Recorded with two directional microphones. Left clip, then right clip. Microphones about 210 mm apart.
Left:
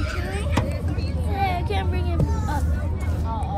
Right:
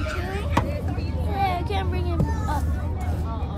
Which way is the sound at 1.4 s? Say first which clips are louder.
Even; 30° right (ahead or behind).